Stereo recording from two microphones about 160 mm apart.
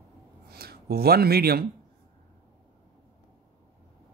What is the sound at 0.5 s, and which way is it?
Speech, 75° right (ahead or behind).